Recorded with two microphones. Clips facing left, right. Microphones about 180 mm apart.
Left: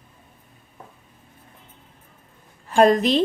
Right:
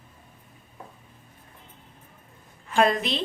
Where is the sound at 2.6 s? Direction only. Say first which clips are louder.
Left 6 dB; 40° left (ahead or behind).